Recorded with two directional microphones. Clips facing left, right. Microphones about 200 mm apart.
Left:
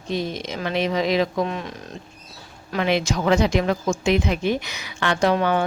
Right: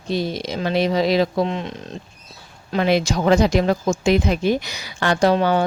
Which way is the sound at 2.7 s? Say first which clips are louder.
Right 3 dB; 35° right (ahead or behind).